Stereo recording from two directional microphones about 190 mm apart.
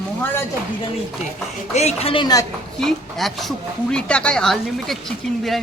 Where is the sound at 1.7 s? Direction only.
35° left (ahead or behind).